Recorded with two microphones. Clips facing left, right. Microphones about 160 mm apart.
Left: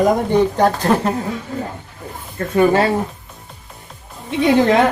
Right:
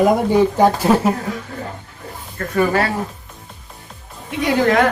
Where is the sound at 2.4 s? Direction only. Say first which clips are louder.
Left 3 dB; 20° left (ahead or behind).